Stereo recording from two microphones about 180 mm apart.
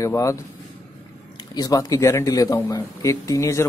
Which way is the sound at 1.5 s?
20° left (ahead or behind).